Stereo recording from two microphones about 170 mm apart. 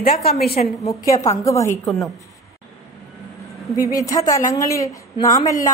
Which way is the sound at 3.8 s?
20° left (ahead or behind).